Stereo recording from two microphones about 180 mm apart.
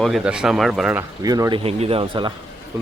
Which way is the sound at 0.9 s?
20° right (ahead or behind).